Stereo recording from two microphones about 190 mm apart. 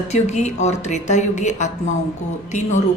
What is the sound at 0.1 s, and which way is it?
A woman's voice, 35° left (ahead or behind).